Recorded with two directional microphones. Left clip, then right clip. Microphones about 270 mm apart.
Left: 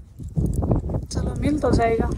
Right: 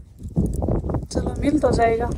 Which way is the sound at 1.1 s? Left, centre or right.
Centre.